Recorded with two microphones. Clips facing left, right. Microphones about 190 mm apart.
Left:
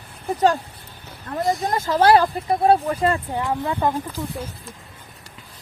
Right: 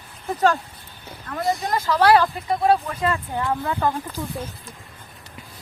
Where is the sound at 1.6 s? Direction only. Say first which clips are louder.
Left 1 dB; 25° left (ahead or behind).